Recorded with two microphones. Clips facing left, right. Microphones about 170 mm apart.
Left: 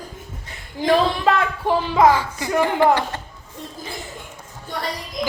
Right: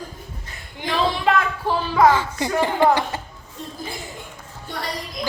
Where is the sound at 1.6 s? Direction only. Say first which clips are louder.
Left 2 dB; 20° left (ahead or behind).